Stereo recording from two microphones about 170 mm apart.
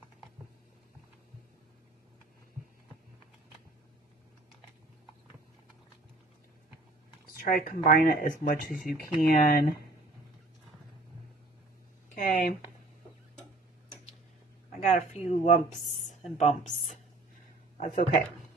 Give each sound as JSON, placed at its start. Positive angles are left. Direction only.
{"t": 7.3, "sound": "speech", "side_deg": 55}
{"t": 12.2, "sound": "a sound", "side_deg": 50}
{"t": 14.8, "sound": "a woman's voice", "side_deg": 45}